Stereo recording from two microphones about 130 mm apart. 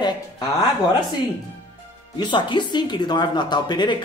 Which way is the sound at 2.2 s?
35° left (ahead or behind).